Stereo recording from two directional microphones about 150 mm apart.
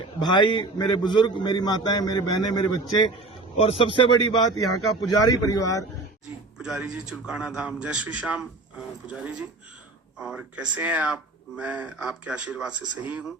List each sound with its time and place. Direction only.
0.2 s a man's voice: 30° left (ahead or behind)
3.6 s a man's voice: 40° left (ahead or behind); by 5.8 s 25° left (ahead or behind)
6.6 s speech: 5° right (ahead or behind)
10.2 s speech: 5° right (ahead or behind)